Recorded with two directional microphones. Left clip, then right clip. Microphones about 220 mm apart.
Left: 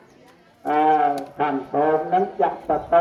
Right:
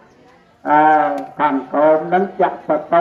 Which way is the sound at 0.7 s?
40° right (ahead or behind).